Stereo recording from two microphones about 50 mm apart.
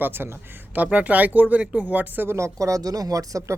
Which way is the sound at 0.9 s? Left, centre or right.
Right.